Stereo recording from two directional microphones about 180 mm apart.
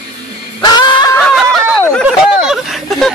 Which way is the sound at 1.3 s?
Centre (ahead or behind).